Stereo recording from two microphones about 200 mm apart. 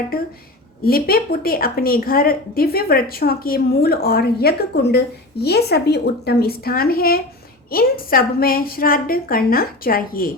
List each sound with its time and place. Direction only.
0.9 s a woman's voice: 50° left (ahead or behind)